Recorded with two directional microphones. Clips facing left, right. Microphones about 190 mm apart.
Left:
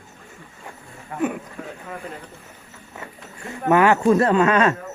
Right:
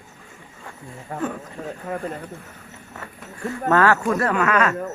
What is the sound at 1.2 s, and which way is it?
Speech, 15° left (ahead or behind).